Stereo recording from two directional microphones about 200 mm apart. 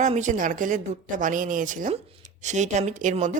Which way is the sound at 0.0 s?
40° right (ahead or behind).